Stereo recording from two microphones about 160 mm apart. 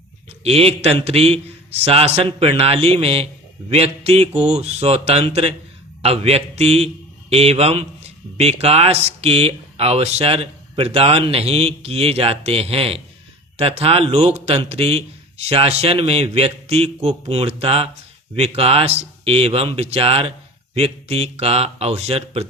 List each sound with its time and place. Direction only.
0.4 s a man's voice: 40° right (ahead or behind)